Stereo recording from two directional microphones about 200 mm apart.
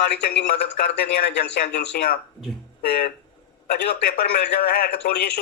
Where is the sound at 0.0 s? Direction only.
55° left (ahead or behind).